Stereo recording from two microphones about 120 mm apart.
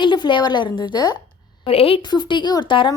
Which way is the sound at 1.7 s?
50° left (ahead or behind).